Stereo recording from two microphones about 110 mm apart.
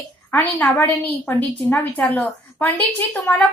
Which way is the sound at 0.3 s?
20° left (ahead or behind).